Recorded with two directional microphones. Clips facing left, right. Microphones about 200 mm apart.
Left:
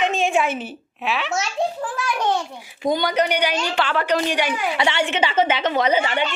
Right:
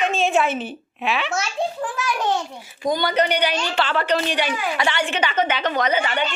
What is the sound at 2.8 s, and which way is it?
Speech, 25° left (ahead or behind).